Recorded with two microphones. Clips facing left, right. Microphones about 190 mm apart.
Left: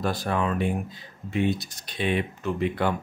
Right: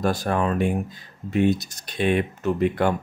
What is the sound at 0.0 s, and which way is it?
Speech, 45° right (ahead or behind).